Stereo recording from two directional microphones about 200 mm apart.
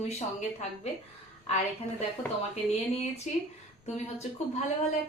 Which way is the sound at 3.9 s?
35° left (ahead or behind).